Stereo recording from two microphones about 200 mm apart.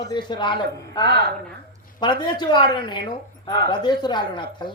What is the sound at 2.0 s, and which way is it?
Speech, 20° left (ahead or behind).